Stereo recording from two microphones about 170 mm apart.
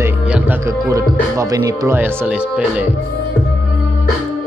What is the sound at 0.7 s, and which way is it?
Speech, 20° right (ahead or behind).